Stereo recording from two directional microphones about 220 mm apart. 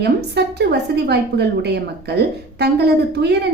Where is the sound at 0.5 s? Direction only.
50° right (ahead or behind).